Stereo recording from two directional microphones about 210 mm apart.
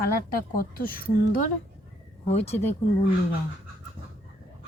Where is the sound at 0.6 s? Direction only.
45° left (ahead or behind).